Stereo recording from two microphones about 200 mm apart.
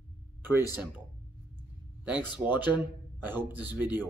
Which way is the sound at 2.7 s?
10° right (ahead or behind).